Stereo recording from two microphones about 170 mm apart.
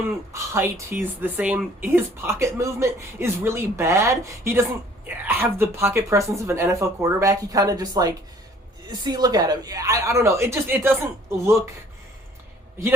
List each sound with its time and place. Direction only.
0.3 s speech: 15° right (ahead or behind)